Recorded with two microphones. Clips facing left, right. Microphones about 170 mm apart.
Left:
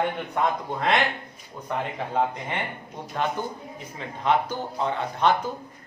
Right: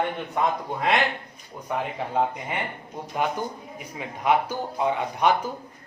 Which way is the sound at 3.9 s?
10° right (ahead or behind).